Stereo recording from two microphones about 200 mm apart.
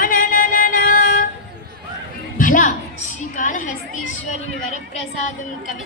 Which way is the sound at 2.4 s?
40° left (ahead or behind).